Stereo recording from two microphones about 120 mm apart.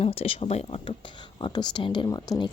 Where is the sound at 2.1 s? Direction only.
30° left (ahead or behind).